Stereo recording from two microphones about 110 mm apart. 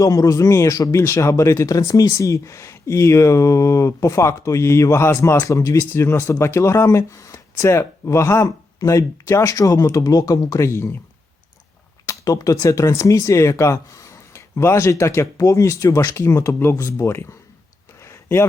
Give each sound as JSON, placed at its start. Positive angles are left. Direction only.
{"t": 0.0, "sound": "speech", "side_deg": 30}
{"t": 10.6, "sound": "speech", "side_deg": 25}
{"t": 12.0, "sound": "speech", "side_deg": 30}
{"t": 18.0, "sound": "a sound", "side_deg": 25}